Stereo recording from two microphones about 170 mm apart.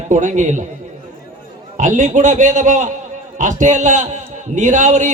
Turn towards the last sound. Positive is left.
turn(degrees=-45)  # may be behind; listen again after turning